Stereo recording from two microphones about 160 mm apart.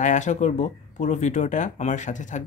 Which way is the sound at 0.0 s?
50° left (ahead or behind).